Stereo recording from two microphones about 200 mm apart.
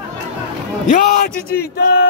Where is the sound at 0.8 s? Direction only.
40° left (ahead or behind).